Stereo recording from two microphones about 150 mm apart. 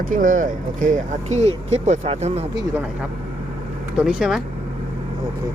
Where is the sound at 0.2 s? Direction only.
65° right (ahead or behind); by 2.5 s 45° right (ahead or behind).